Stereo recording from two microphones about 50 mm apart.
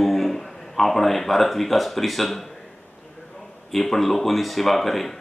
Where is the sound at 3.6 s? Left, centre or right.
Centre.